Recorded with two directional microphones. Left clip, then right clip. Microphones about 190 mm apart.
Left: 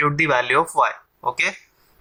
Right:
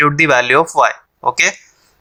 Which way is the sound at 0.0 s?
35° right (ahead or behind).